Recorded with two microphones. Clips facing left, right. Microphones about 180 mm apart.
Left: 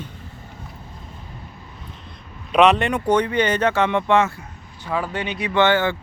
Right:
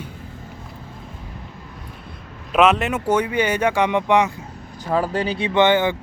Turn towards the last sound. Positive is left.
turn(degrees=-20)  # may be behind; listen again after turning